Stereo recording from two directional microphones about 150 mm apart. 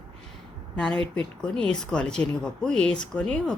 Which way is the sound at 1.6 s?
5° left (ahead or behind).